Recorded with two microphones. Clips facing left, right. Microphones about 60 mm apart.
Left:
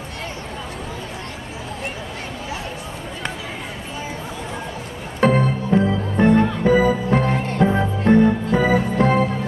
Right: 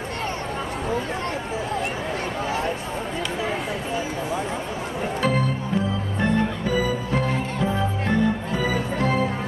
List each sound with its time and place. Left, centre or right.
5.2 s music: left